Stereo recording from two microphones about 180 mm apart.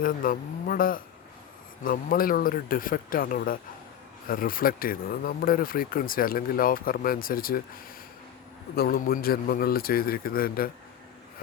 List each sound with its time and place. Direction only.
0.0 s a man's voice: 50° left (ahead or behind)